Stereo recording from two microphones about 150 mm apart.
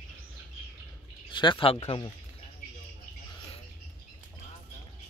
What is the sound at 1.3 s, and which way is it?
Speech, 30° left (ahead or behind).